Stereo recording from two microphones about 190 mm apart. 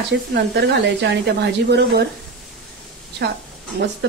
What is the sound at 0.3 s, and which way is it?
A woman's voice, 60° right (ahead or behind).